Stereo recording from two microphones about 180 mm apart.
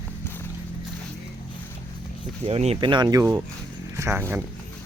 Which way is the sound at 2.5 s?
35° right (ahead or behind).